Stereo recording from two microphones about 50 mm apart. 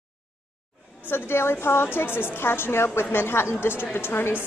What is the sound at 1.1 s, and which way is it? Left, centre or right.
A woman's voice, left.